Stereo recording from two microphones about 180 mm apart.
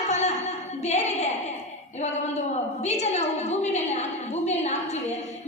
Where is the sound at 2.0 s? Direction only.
40° left (ahead or behind).